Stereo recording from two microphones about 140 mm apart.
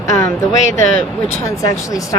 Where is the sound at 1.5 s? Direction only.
25° left (ahead or behind).